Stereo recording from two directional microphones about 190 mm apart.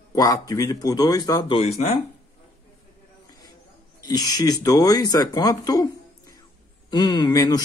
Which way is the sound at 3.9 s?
20° left (ahead or behind).